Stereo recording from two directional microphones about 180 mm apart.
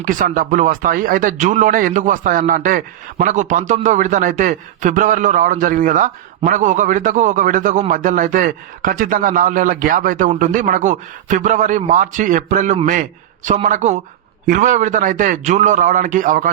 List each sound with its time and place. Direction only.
0.0 s a man's voice: 50° right (ahead or behind)